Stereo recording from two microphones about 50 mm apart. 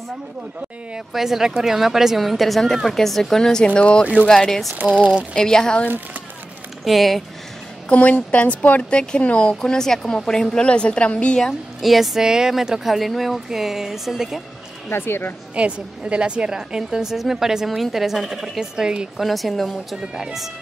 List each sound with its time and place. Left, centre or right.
1.1 s speech: centre
4.7 s a sound: right
5.3 s speech: centre
6.8 s speech: centre
7.9 s a woman's voice: left
11.8 s speech: centre
14.9 s speech: left
15.5 s speech: right
19.1 s speech: centre